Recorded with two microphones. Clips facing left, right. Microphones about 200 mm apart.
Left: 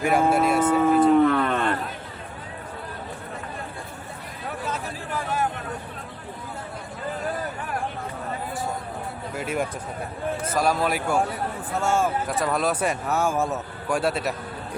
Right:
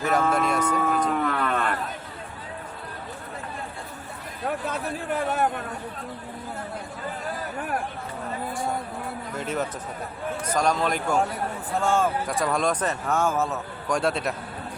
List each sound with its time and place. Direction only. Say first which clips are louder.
0.0 s speech: left 3 dB; 10° left (ahead or behind)
1.0 s a sound: left 8 dB; 25° left (ahead or behind)
4.7 s a man's voice: right 2 dB; 55° right (ahead or behind)
9.3 s speech: left 2 dB; 10° left (ahead or behind)